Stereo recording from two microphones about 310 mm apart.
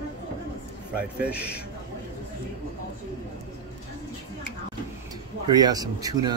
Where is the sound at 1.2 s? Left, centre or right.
Centre.